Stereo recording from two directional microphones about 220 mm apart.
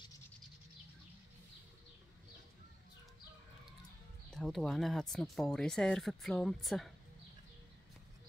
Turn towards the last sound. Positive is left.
turn(degrees=0)  # may be behind; listen again after turning